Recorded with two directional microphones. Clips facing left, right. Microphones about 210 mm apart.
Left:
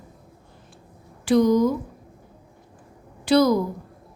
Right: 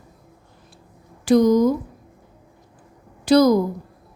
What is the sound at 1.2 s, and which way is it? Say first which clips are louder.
Speech: right 3 dB; 40° right (ahead or behind).